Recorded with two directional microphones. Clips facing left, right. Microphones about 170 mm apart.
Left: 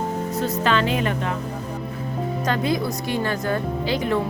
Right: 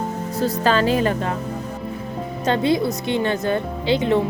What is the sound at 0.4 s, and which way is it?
Speech, 35° right (ahead or behind).